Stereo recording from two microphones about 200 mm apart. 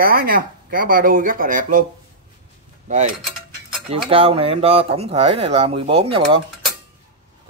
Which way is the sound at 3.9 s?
30° right (ahead or behind).